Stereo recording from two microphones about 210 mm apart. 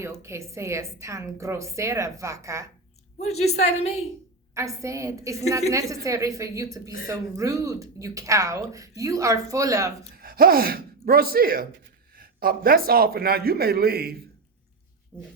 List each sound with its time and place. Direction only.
0.2 s a woman's voice: 15° right (ahead or behind)
3.2 s a woman's voice: 30° left (ahead or behind)
4.5 s a woman's voice: 15° right (ahead or behind)
10.2 s speech: 45° right (ahead or behind)
15.1 s speech: 5° left (ahead or behind)